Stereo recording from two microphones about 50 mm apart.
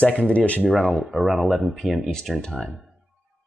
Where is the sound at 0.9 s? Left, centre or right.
Centre.